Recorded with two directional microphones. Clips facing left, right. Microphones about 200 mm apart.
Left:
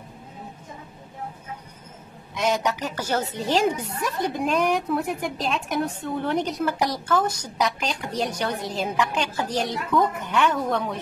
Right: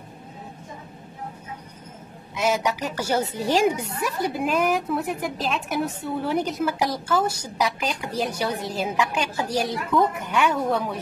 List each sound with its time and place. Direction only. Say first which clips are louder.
2.3 s a woman's voice: even; 5° right (ahead or behind)